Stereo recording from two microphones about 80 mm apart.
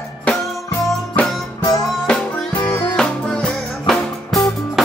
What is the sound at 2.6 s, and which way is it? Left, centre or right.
Music, centre.